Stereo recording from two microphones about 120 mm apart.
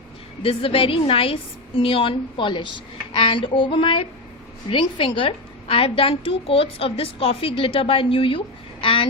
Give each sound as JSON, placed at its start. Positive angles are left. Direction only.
{"t": 0.4, "sound": "a woman's voice", "side_deg": 50}